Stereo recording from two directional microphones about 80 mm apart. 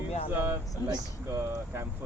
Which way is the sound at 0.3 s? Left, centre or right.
Right.